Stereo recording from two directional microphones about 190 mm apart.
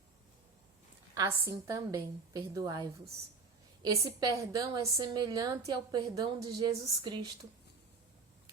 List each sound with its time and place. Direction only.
1.1 s a woman's voice: 20° right (ahead or behind)